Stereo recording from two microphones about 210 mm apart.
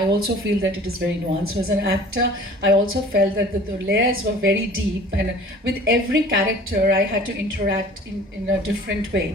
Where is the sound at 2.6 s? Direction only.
55° right (ahead or behind).